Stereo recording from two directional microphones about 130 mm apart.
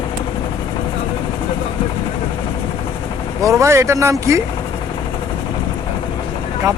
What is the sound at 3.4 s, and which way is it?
Speech, 20° right (ahead or behind).